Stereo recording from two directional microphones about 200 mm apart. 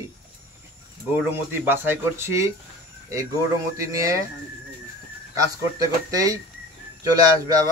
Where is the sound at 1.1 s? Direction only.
10° right (ahead or behind).